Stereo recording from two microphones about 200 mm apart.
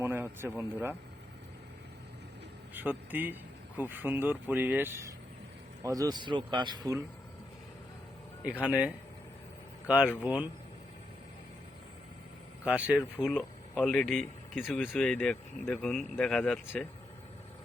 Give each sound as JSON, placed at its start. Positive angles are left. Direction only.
{"t": 0.0, "sound": "speech", "side_deg": -10}
{"t": 2.7, "sound": "speech", "side_deg": -10}
{"t": 8.6, "sound": "speech", "side_deg": -5}
{"t": 12.6, "sound": "speech", "side_deg": -5}